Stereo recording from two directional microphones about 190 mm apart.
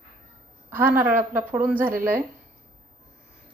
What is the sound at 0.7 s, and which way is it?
A woman's voice, 10° right (ahead or behind).